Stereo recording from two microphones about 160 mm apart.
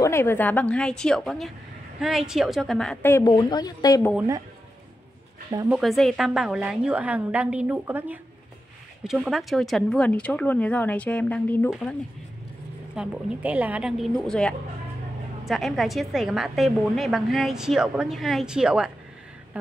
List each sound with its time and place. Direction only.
0.0 s a woman's voice: 15° left (ahead or behind)
3.3 s speech: 25° left (ahead or behind)
5.7 s a woman's voice: centre (ahead or behind)
12.9 s a woman's voice: 5° right (ahead or behind)
19.6 s a sound: 10° right (ahead or behind)